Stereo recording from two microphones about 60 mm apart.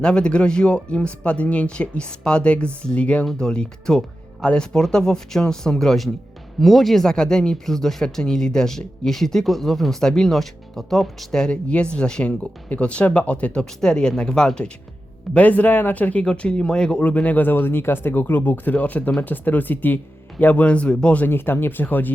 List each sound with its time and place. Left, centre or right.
0.0 s speech: centre
21.2 s speech: left